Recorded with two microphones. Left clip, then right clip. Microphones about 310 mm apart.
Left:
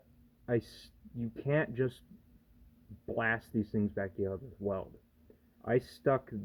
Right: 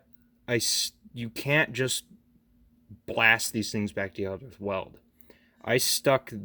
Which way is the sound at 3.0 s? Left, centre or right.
Right.